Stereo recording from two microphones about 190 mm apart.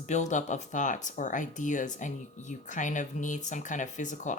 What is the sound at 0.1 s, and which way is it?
Speech, 40° left (ahead or behind).